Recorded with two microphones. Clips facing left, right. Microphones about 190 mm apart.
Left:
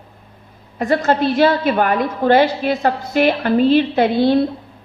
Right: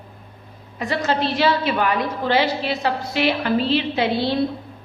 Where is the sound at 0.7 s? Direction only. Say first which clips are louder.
Left 6 dB; 50° left (ahead or behind).